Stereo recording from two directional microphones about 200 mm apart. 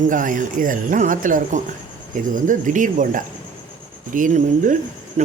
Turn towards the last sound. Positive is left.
turn(degrees=-40)  # may be behind; listen again after turning